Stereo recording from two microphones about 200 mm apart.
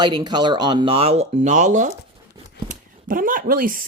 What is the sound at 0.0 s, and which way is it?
Speech, 20° right (ahead or behind).